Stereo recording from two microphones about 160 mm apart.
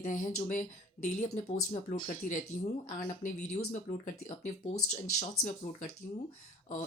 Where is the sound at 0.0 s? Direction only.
55° left (ahead or behind).